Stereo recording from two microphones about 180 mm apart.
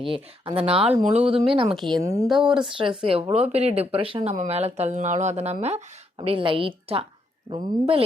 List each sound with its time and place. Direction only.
0.0 s speech: 30° right (ahead or behind)
2.0 s speech: 15° right (ahead or behind)
2.2 s speech: centre (ahead or behind)
3.0 s speech: 30° right (ahead or behind)